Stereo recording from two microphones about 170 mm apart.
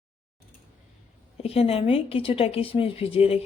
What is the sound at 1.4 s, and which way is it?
Speech, 35° left (ahead or behind).